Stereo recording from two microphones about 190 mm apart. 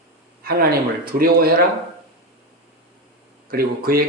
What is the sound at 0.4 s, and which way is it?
A man's voice, 50° right (ahead or behind).